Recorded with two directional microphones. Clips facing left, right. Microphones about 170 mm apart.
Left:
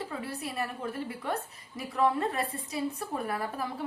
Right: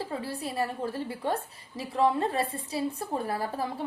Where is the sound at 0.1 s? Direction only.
30° right (ahead or behind).